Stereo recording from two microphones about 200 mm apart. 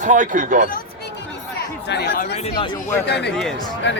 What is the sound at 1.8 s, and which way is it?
Speech, 55° left (ahead or behind).